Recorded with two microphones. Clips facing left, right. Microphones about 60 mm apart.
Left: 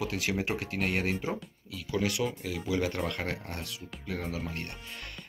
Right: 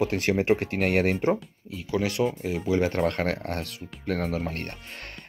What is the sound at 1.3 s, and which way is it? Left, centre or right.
Speech, right.